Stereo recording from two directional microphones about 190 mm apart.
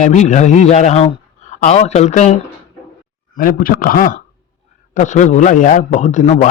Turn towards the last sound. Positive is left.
turn(degrees=40)  # may be behind; listen again after turning